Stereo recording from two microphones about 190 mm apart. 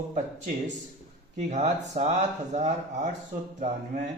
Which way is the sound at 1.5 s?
35° right (ahead or behind).